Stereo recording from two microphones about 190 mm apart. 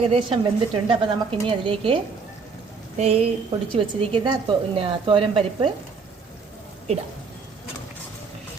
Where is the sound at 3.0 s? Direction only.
30° right (ahead or behind).